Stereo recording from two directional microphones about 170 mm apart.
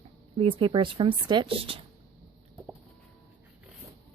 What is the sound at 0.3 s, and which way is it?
Speech, 30° right (ahead or behind).